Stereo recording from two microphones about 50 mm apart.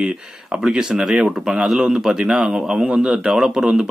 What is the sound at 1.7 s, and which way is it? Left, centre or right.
Speech, centre.